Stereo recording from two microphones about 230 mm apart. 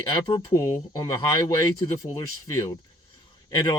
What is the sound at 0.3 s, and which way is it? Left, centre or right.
Speech, centre.